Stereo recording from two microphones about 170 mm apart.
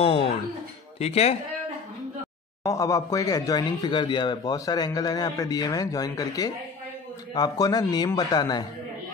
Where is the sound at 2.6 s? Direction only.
20° left (ahead or behind).